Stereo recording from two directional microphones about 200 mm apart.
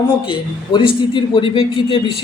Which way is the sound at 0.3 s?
25° left (ahead or behind).